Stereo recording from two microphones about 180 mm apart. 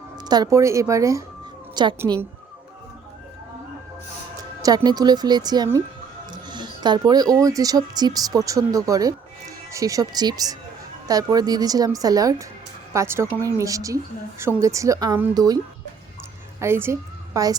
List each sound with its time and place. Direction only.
0.3 s a woman's voice: 20° right (ahead or behind)
4.4 s a woman's voice: 20° right (ahead or behind)